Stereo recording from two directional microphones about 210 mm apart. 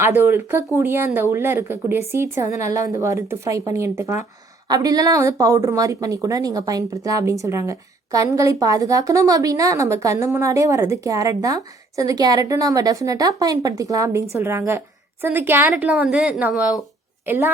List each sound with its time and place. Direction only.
0.0 s a woman's voice: 10° right (ahead or behind)